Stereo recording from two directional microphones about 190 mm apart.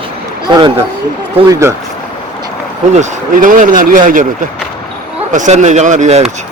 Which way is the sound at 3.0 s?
45° right (ahead or behind).